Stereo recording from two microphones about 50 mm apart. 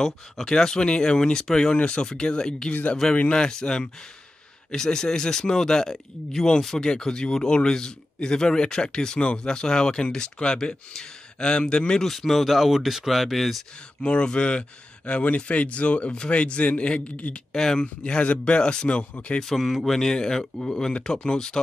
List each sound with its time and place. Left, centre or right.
0.0 s speech: centre
2.7 s speech: left
3.3 s speech: centre
12.1 s speech: centre
14.0 s speech: centre
17.5 s speech: centre
19.4 s speech: centre